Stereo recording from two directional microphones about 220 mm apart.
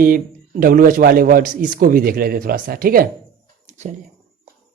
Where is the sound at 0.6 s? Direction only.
40° right (ahead or behind).